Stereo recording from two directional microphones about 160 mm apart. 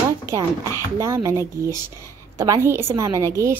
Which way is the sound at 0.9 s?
20° right (ahead or behind).